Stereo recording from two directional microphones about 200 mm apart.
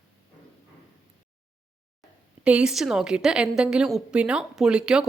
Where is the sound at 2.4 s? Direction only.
5° right (ahead or behind).